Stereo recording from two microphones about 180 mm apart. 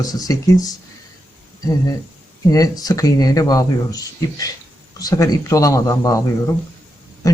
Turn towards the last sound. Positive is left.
turn(degrees=20)  # may be behind; listen again after turning